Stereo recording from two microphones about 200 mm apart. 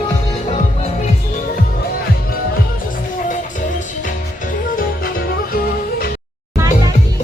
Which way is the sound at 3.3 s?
40° left (ahead or behind).